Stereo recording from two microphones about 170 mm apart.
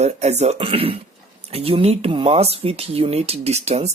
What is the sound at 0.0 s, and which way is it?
Speech, 40° right (ahead or behind).